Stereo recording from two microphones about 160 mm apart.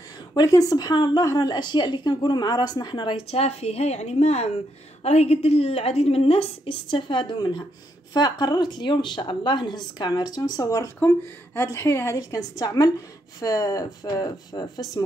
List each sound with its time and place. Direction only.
0.3 s a woman's voice: 20° left (ahead or behind)